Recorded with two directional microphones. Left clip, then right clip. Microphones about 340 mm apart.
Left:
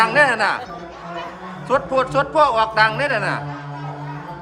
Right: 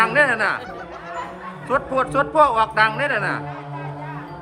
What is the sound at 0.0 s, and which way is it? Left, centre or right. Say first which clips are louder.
Speech: left 2 dB; centre.